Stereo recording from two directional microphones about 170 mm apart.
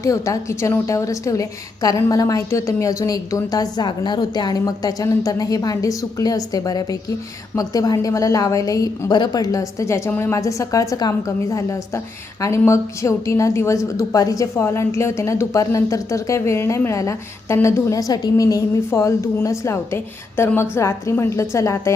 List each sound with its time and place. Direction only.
0.0 s a woman's voice: 20° left (ahead or behind)